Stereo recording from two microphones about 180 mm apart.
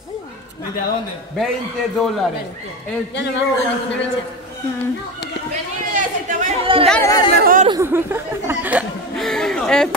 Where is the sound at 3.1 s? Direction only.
75° left (ahead or behind).